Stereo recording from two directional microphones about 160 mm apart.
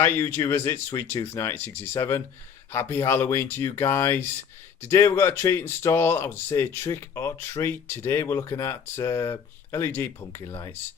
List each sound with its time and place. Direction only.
0.3 s speech: 15° left (ahead or behind)